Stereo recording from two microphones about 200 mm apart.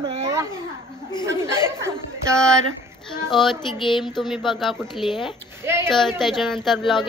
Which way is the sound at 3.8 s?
25° left (ahead or behind).